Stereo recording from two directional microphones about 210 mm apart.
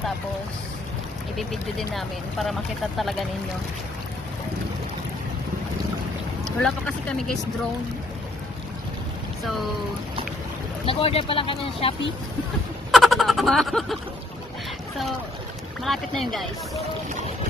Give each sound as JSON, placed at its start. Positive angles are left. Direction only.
{"t": 1.3, "sound": "speech", "side_deg": 0}
{"t": 6.6, "sound": "speech", "side_deg": 5}
{"t": 9.4, "sound": "speech", "side_deg": 0}
{"t": 10.9, "sound": "speech", "side_deg": 25}
{"t": 12.9, "sound": "a sound", "side_deg": 0}
{"t": 15.8, "sound": "speech", "side_deg": 0}